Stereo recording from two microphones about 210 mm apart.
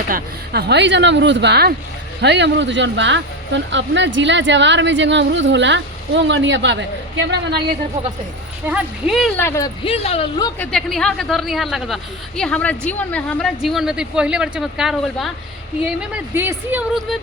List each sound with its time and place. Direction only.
0.1 s speech: 50° right (ahead or behind)
8.6 s a woman's voice: 5° right (ahead or behind)
9.4 s speech: 10° left (ahead or behind)
9.8 s speech: 30° left (ahead or behind)
10.7 s a woman's voice: centre (ahead or behind)